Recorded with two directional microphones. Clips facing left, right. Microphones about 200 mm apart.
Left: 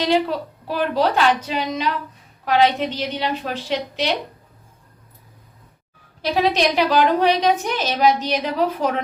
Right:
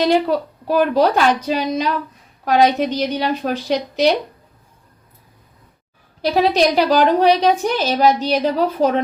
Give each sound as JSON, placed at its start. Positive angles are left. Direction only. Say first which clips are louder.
{"t": 0.0, "sound": "a woman's voice", "louder": "right 4 dB", "side_deg": -45}
{"t": 6.3, "sound": "a woman's voice", "louder": "right 3 dB", "side_deg": -35}